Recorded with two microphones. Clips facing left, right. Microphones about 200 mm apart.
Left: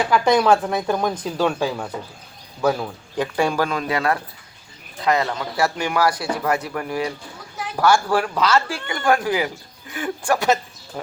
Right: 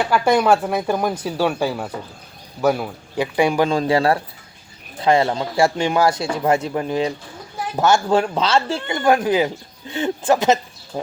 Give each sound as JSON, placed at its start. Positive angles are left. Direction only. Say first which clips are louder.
{"t": 0.0, "sound": "speech", "louder": "even", "side_deg": -5}
{"t": 3.7, "sound": "speech", "louder": "right 5 dB", "side_deg": -30}